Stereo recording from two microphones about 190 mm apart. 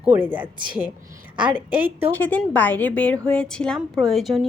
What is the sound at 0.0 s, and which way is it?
A woman's voice, 10° right (ahead or behind).